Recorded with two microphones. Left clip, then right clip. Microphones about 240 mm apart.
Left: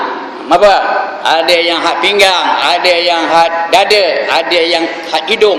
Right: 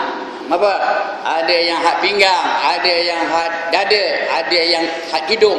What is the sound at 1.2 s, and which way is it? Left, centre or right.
Speech, left.